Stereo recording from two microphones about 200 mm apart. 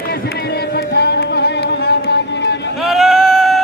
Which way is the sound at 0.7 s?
55° left (ahead or behind).